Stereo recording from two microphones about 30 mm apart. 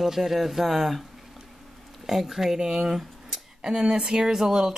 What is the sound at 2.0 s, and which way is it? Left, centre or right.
Speech, centre.